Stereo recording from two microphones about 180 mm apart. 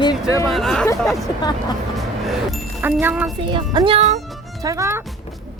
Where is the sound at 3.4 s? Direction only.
25° right (ahead or behind).